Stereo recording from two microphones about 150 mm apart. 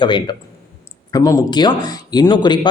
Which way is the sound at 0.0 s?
30° left (ahead or behind).